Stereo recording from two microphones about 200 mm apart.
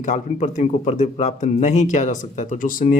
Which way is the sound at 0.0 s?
40° left (ahead or behind).